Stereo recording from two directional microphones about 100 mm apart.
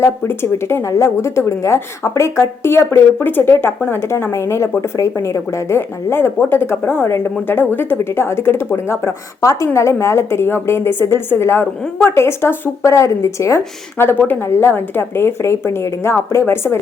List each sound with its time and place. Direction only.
0.0 s a woman's voice: 25° left (ahead or behind)